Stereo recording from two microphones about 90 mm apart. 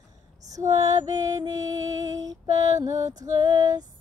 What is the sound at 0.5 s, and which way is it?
Music, 40° right (ahead or behind).